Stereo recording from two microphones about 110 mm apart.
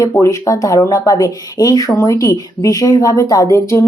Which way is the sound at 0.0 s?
30° left (ahead or behind).